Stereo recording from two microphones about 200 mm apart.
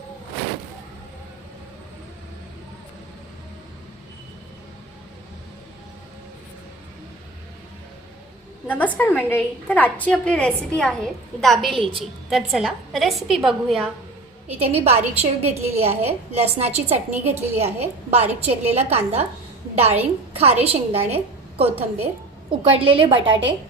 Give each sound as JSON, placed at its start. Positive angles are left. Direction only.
{"t": 8.6, "sound": "a woman's voice", "side_deg": 10}
{"t": 14.4, "sound": "a woman's voice", "side_deg": -30}
{"t": 17.1, "sound": "a woman's voice", "side_deg": -10}
{"t": 17.4, "sound": "a woman's voice", "side_deg": -30}